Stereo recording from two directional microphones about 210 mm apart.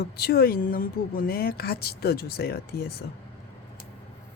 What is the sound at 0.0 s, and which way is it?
Speech, 50° left (ahead or behind).